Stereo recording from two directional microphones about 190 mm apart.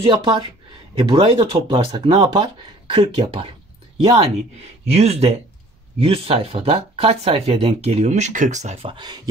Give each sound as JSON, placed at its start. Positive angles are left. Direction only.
{"t": 0.0, "sound": "speech", "side_deg": -25}